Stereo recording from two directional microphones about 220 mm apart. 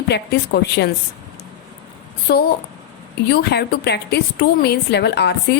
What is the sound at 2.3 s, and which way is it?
A woman's voice, 45° left (ahead or behind).